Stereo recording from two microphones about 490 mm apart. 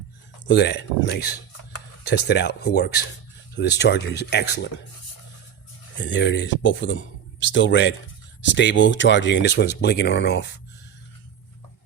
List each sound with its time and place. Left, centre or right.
0.4 s speech: left
6.0 s speech: left